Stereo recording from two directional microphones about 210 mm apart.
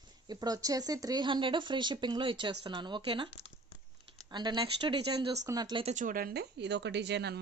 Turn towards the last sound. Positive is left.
turn(degrees=-55)  # may be behind; listen again after turning